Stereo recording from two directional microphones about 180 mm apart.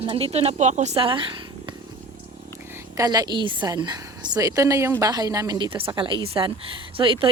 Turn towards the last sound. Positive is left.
turn(degrees=-30)  # may be behind; listen again after turning